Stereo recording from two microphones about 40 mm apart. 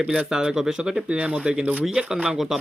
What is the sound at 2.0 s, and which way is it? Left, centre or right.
Speech, right.